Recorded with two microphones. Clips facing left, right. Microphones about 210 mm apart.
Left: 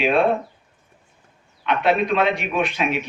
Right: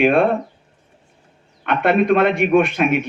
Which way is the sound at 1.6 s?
55° right (ahead or behind).